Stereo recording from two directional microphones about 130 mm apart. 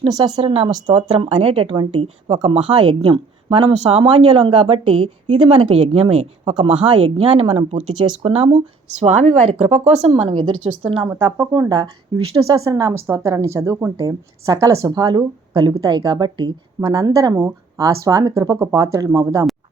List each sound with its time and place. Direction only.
0.1 s speech: 35° right (ahead or behind)
9.0 s speech: 60° right (ahead or behind)
11.1 s a woman's voice: 20° right (ahead or behind)